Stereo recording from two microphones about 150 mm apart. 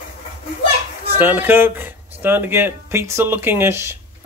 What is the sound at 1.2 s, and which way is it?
Speech, 10° right (ahead or behind).